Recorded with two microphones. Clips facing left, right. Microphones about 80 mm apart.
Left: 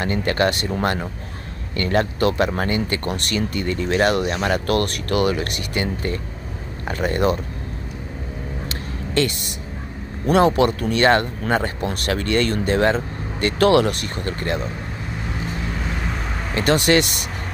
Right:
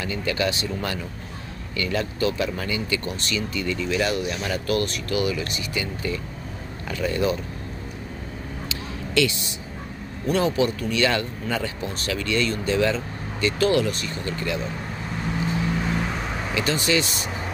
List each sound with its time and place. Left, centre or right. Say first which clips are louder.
0.0 s speech: left 5 dB; left
8.6 s a sound: left 2 dB; left
10.2 s speech: left 6 dB; left
16.5 s speech: left 6 dB; left